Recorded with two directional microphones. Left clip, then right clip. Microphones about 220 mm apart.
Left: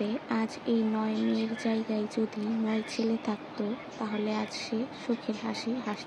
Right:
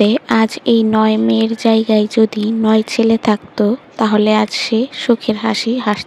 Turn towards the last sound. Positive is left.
turn(degrees=-45)  # may be behind; listen again after turning